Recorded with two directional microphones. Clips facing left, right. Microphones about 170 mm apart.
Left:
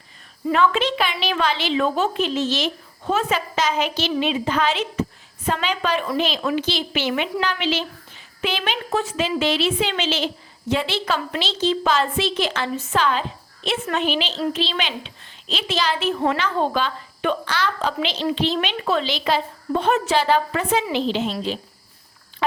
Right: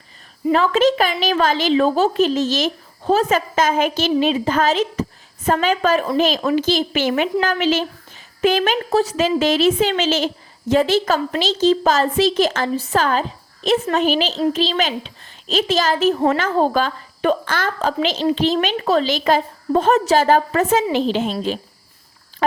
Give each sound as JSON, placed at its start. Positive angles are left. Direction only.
{"t": 0.5, "sound": "a woman's voice", "side_deg": -40}